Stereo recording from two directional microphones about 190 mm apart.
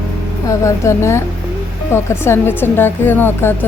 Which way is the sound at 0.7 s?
15° left (ahead or behind).